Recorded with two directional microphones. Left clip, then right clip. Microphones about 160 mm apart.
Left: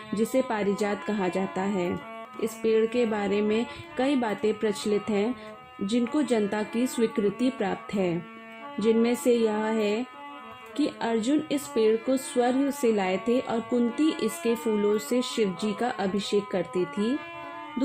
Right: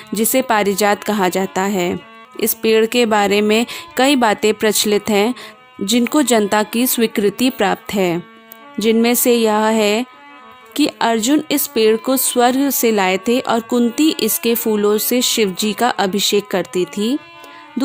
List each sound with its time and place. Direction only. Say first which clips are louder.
0.3 s speech: right 12 dB; 90° right